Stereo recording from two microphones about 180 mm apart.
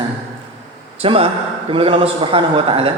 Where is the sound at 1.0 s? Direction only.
30° right (ahead or behind).